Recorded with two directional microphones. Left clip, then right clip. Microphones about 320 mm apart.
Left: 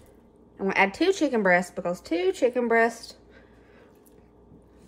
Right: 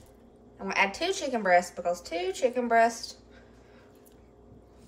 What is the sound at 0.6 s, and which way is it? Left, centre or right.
Speech, left.